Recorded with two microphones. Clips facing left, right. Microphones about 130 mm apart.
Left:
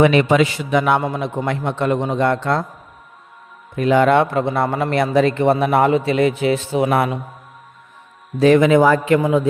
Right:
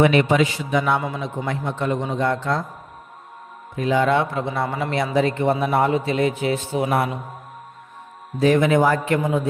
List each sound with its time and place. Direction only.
0.0 s a man's voice: 90° left; by 1.0 s 70° left (ahead or behind)
1.0 s a man's voice: 50° left (ahead or behind); by 2.6 s 70° left (ahead or behind)
3.8 s a man's voice: 65° left (ahead or behind); by 7.1 s 90° left
8.4 s a man's voice: 90° left